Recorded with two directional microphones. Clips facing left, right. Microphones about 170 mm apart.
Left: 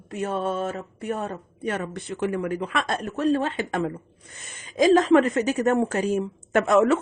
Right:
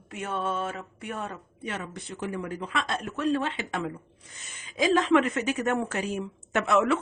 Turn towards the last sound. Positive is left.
turn(degrees=45)  # may be behind; listen again after turning